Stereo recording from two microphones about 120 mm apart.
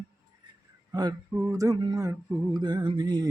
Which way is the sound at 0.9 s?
35° right (ahead or behind).